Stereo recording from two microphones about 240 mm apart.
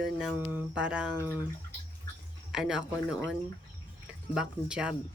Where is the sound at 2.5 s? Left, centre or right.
Centre.